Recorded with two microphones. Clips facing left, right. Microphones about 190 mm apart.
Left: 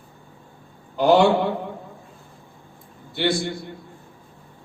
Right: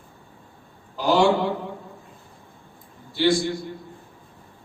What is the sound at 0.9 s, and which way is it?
Speech, 60° left (ahead or behind).